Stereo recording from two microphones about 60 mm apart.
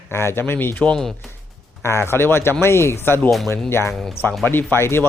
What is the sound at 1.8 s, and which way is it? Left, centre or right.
A man's voice, left.